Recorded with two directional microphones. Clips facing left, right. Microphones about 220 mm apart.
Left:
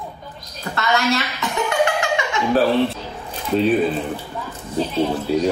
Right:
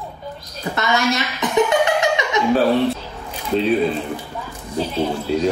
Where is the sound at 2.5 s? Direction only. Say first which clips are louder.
Even; centre (ahead or behind).